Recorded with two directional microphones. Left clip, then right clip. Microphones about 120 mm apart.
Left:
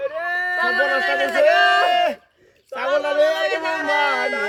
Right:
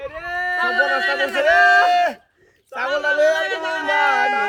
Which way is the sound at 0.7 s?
20° right (ahead or behind).